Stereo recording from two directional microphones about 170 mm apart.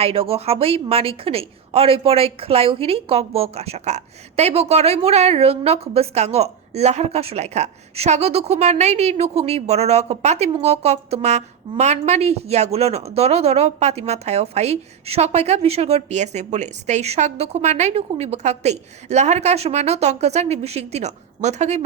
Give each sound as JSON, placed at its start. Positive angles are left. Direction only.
{"t": 0.0, "sound": "a woman's voice", "side_deg": -35}